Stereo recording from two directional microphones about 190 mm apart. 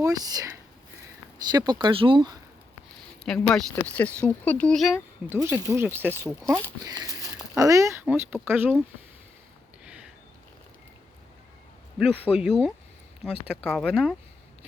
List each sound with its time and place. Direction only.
0.0 s speech: 20° right (ahead or behind)
3.2 s speech: 5° left (ahead or behind)
5.3 s speech: 15° right (ahead or behind)
6.4 s speech: 5° left (ahead or behind)
6.8 s speech: 20° right (ahead or behind)
9.8 s a sound: 5° right (ahead or behind)
12.4 s speech: centre (ahead or behind)